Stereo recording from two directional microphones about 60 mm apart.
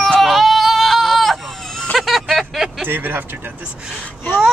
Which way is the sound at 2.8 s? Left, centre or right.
Right.